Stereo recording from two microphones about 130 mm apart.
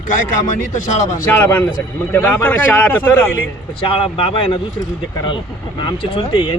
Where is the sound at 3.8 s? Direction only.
45° left (ahead or behind).